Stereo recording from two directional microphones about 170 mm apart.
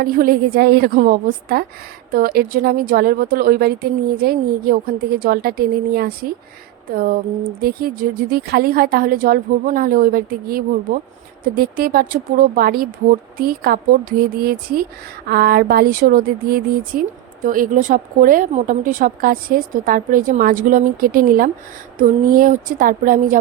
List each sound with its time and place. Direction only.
0.0 s speech: 60° right (ahead or behind)